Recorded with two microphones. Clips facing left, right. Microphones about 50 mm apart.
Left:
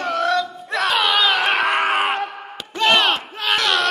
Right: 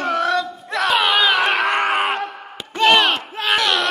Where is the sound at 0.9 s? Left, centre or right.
Centre.